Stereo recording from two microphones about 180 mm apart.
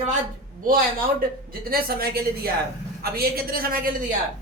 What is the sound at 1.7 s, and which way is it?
A woman's voice, 55° right (ahead or behind).